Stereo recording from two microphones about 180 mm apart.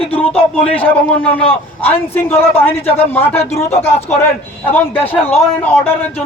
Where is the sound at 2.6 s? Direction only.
35° left (ahead or behind).